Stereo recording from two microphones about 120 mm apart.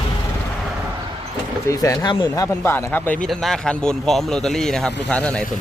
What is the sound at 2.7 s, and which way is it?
Speech, 15° left (ahead or behind).